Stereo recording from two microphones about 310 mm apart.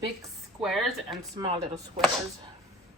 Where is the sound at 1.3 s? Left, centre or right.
Centre.